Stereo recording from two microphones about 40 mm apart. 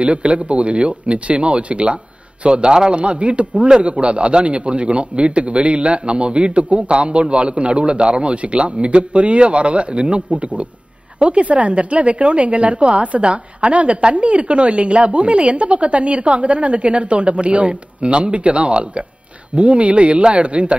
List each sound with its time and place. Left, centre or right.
0.0 s a man's voice: right